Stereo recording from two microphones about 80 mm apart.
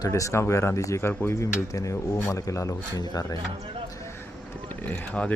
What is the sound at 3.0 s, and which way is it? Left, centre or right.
Speech, left.